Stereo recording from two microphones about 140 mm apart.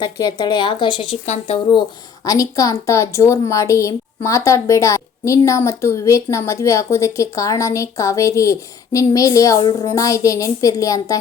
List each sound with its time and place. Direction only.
0.0 s speech: 30° left (ahead or behind)
1.2 s speech: 55° left (ahead or behind)
2.2 s a woman's voice: 25° left (ahead or behind)